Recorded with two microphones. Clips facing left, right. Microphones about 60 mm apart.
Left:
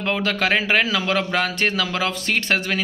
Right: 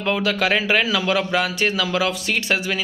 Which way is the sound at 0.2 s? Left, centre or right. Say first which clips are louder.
Right 1 dB; left.